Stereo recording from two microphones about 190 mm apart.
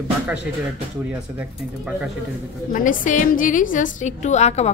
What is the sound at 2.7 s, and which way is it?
A woman's voice, 45° left (ahead or behind).